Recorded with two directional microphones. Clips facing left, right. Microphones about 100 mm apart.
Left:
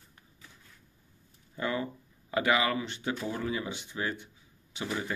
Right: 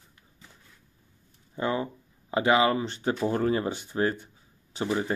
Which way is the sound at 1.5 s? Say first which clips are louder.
Right 4 dB; 25° right (ahead or behind).